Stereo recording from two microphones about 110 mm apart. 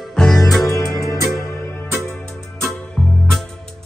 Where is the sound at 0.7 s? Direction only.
30° left (ahead or behind).